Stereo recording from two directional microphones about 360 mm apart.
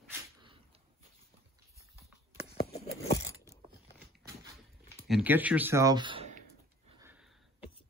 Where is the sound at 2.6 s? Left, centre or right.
Left.